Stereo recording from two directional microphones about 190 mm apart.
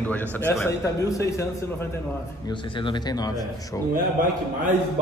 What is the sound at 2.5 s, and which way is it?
Speech, 25° left (ahead or behind).